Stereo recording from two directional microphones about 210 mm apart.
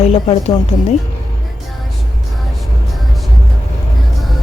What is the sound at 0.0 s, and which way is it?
Speech, 30° left (ahead or behind).